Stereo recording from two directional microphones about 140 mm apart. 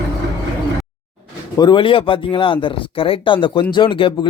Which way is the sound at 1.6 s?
35° left (ahead or behind).